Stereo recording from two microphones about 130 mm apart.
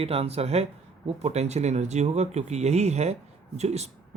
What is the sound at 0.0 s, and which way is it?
Speech, 50° right (ahead or behind).